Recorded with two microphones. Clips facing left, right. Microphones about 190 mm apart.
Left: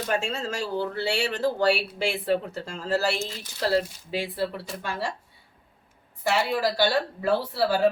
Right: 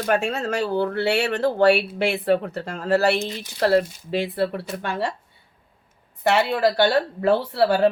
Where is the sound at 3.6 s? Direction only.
60° right (ahead or behind).